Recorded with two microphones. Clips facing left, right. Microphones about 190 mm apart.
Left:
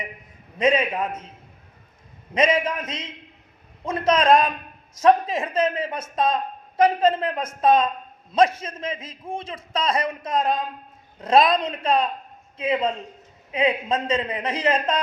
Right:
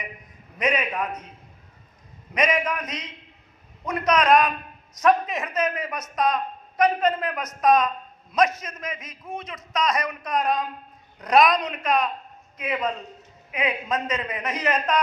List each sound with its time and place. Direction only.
0.6 s a man's voice: 25° left (ahead or behind)
2.3 s a man's voice: 25° left (ahead or behind)